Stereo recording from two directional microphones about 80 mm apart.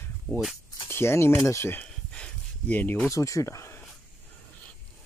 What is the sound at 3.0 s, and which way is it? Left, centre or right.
Speech, left.